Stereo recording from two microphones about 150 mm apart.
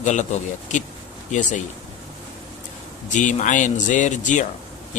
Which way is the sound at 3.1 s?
55° left (ahead or behind).